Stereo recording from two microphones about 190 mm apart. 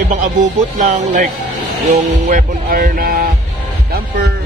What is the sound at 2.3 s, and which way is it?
Speech, 50° right (ahead or behind).